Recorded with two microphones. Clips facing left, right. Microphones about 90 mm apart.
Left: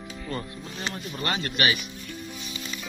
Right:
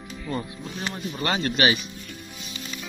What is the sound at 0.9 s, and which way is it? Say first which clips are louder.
Speech: right 3 dB; 20° right (ahead or behind).